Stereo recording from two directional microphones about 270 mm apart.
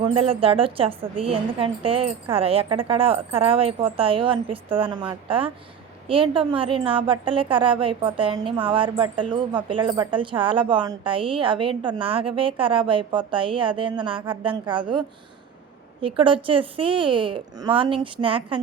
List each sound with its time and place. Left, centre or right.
0.0 s speech: right